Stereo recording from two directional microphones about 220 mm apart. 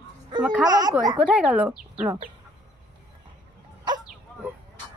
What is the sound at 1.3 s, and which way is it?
Speech, 5° right (ahead or behind).